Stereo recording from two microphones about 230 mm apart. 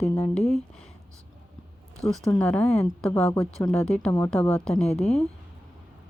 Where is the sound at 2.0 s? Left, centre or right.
Centre.